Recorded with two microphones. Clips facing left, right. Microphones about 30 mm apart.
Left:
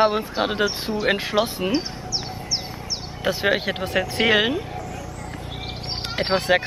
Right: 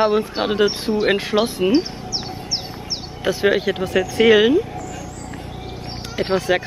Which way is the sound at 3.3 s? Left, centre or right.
Centre.